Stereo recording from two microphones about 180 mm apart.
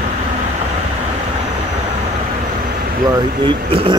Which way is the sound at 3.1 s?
30° right (ahead or behind).